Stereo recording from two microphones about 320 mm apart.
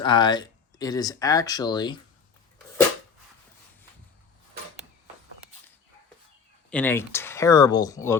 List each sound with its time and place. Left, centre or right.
0.0 s speech: centre
6.7 s speech: centre